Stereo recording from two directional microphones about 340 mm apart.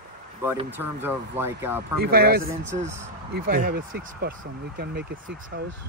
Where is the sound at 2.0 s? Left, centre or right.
Right.